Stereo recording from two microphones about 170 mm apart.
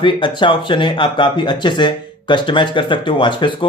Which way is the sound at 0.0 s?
30° left (ahead or behind).